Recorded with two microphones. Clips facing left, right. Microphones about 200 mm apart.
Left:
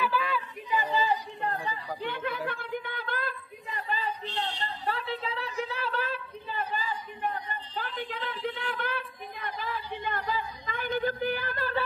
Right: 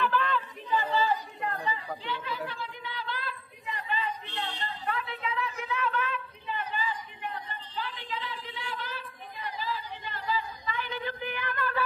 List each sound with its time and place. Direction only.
0.0 s chatter: 10° left (ahead or behind)
1.4 s chatter: 40° left (ahead or behind)
3.8 s a sound: 35° left (ahead or behind)